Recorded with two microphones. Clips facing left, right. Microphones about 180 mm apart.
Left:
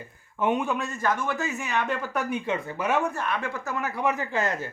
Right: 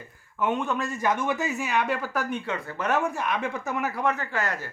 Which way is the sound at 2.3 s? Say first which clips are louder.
Left 2 dB; 15° left (ahead or behind).